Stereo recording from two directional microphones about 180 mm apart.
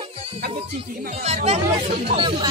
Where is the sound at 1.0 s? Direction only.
40° right (ahead or behind).